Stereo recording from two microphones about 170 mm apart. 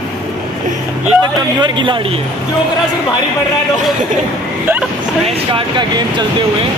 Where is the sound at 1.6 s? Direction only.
30° right (ahead or behind).